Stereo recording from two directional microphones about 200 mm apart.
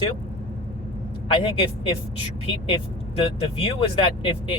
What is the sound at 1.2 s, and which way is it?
Speech, 25° left (ahead or behind).